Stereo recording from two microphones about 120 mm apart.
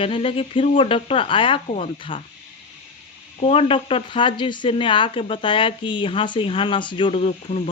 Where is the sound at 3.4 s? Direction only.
50° left (ahead or behind).